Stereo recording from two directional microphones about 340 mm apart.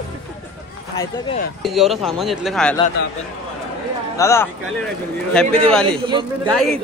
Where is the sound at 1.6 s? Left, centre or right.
Centre.